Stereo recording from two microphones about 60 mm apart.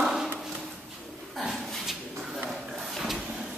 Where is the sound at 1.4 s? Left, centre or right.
Centre.